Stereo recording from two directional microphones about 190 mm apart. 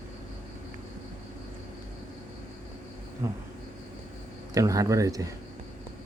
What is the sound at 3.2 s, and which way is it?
Speech, 15° right (ahead or behind).